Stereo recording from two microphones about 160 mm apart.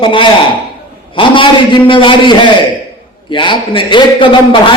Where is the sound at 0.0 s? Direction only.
30° left (ahead or behind).